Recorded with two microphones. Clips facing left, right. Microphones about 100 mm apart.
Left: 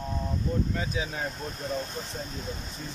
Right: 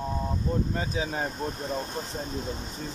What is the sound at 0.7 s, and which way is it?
Speech, 35° right (ahead or behind).